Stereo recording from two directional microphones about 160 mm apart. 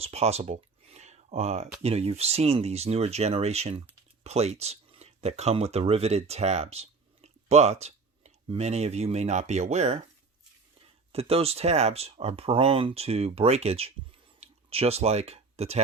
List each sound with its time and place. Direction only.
0.0 s a sound: 40° right (ahead or behind)
1.8 s speech: 40° right (ahead or behind)
11.1 s speech: 40° right (ahead or behind)